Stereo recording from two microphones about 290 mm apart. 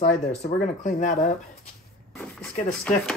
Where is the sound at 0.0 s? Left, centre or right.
Left.